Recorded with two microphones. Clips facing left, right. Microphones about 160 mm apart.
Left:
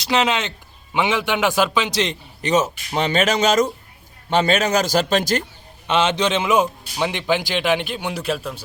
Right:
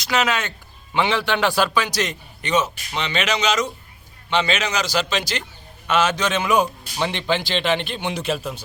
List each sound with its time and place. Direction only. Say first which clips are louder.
0.0 s a man's voice: left 2 dB; 30° left (ahead or behind); by 5.4 s 50° left (ahead or behind)
5.9 s a man's voice: left 1 dB; 25° left (ahead or behind); by 8.5 s centre (ahead or behind)